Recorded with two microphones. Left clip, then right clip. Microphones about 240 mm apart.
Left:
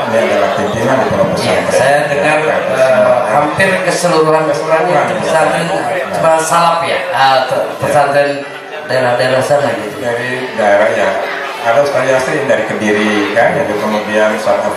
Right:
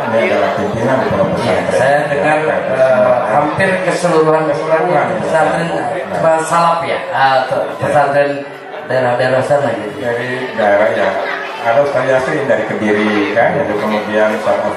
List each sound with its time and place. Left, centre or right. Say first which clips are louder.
0.2 s speech: left 2 dB; centre
10.6 s speech: left 2 dB; centre